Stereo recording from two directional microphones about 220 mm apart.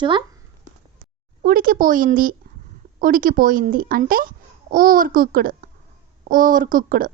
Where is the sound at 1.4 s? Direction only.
40° right (ahead or behind).